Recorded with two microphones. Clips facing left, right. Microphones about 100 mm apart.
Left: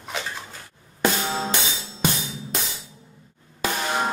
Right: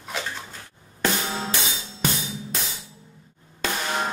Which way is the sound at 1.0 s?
20° left (ahead or behind).